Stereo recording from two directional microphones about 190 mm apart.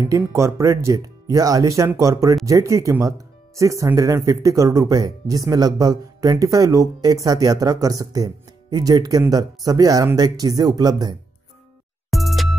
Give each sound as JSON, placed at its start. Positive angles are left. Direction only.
{"t": 0.1, "sound": "speech", "side_deg": -15}
{"t": 12.1, "sound": "music", "side_deg": 0}